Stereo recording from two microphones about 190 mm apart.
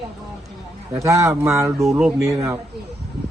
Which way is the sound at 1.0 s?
15° right (ahead or behind).